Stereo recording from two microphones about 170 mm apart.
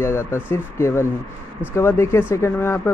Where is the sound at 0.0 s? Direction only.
15° left (ahead or behind).